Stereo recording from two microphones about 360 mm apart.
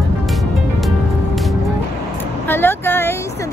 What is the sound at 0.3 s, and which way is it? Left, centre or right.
Music, centre.